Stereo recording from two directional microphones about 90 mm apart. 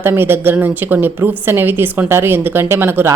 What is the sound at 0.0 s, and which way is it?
A woman's voice, 25° right (ahead or behind).